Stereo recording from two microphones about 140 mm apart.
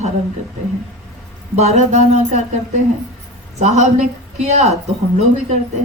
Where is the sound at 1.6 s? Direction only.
55° right (ahead or behind).